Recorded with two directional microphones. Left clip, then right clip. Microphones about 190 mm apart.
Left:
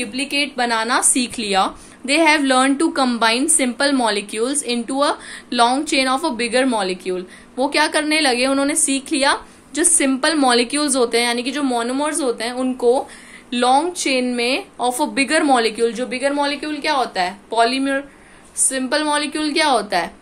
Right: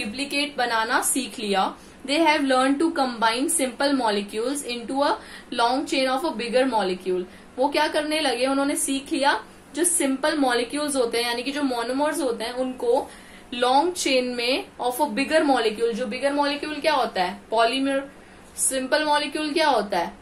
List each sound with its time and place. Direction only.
0.1 s a woman's voice: 35° left (ahead or behind)
13.5 s speech: 35° left (ahead or behind)